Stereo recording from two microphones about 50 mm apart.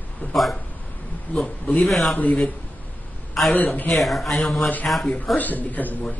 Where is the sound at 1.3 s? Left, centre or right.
Left.